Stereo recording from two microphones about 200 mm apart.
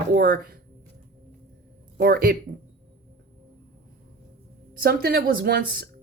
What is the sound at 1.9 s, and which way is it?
Speech, 50° right (ahead or behind).